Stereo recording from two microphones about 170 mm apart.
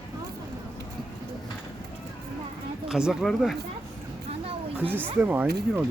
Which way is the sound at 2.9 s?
5° right (ahead or behind).